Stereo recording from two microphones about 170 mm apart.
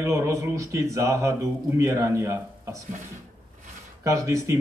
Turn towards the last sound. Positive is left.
turn(degrees=-15)  # may be behind; listen again after turning